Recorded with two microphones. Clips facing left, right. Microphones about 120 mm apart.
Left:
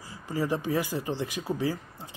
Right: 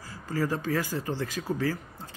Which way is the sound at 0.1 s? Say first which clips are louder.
Even; 20° left (ahead or behind).